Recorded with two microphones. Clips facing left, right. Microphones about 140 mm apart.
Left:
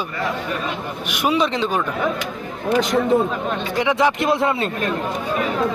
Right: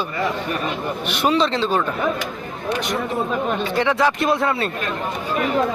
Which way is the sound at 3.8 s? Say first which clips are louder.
Left 1 dB; 15° left (ahead or behind).